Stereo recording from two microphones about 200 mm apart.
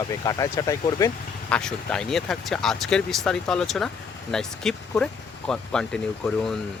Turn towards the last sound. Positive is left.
turn(degrees=5)  # may be behind; listen again after turning